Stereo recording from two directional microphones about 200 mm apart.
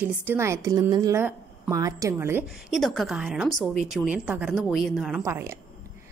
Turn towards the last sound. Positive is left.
turn(degrees=-10)  # may be behind; listen again after turning